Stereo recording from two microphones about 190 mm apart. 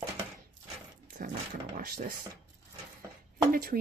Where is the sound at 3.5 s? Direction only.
50° right (ahead or behind).